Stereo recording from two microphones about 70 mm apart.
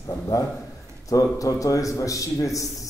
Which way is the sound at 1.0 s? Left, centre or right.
Left.